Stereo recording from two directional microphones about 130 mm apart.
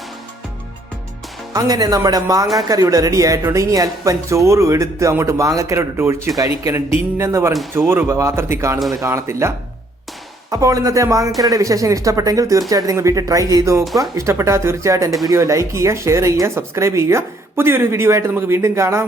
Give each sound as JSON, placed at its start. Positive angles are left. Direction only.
{"t": 1.5, "sound": "speech", "side_deg": -30}
{"t": 10.5, "sound": "speech", "side_deg": -25}
{"t": 13.8, "sound": "speech", "side_deg": 0}
{"t": 14.2, "sound": "speech", "side_deg": -20}